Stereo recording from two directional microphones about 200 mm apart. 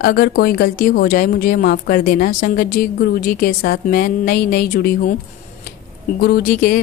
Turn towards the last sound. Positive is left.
turn(degrees=45)  # may be behind; listen again after turning